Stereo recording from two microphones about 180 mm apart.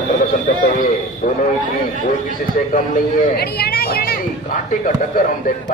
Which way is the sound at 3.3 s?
60° left (ahead or behind).